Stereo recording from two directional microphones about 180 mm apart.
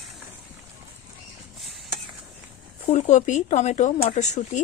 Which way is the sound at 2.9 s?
40° left (ahead or behind).